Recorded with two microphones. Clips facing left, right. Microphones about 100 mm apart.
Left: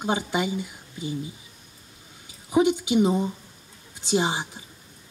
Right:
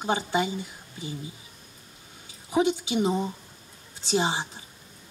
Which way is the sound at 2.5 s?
20° left (ahead or behind).